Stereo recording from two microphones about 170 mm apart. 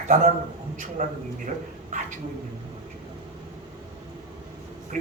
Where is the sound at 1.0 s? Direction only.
40° right (ahead or behind).